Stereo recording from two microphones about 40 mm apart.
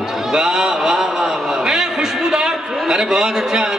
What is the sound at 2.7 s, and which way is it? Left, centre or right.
A man's voice, centre.